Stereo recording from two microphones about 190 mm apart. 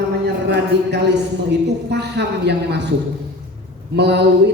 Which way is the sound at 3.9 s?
65° right (ahead or behind).